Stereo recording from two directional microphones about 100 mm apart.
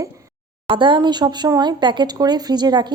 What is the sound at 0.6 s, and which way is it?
Speech, 55° right (ahead or behind).